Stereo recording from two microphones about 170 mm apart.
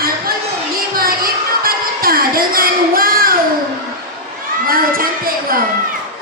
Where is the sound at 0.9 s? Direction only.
60° right (ahead or behind).